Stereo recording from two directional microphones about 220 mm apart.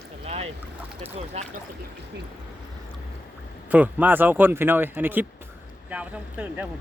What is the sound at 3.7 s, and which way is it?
Speech, 10° right (ahead or behind).